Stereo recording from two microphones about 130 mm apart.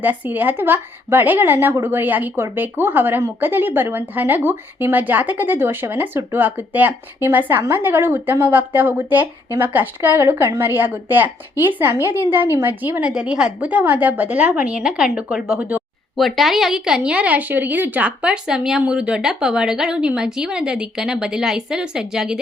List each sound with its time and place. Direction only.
0.0 s a woman's voice: 15° right (ahead or behind)